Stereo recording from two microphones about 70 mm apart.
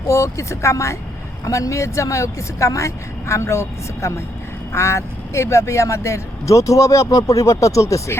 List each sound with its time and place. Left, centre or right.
0.1 s speech: left